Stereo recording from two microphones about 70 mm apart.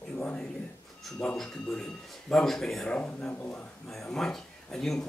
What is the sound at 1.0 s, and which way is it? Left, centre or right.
Speech, centre.